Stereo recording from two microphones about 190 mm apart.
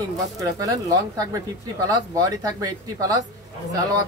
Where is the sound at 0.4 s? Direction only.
20° right (ahead or behind).